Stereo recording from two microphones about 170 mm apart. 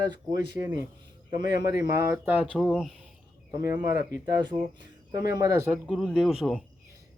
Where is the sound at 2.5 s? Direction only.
5° left (ahead or behind).